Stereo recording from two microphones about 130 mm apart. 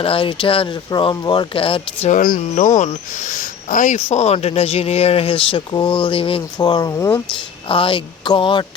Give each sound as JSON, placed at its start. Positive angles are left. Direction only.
{"t": 0.0, "sound": "speech", "side_deg": 45}
{"t": 2.0, "sound": "speech", "side_deg": 85}
{"t": 3.9, "sound": "speech", "side_deg": 60}
{"t": 6.6, "sound": "speech", "side_deg": 30}
{"t": 7.7, "sound": "speech", "side_deg": 40}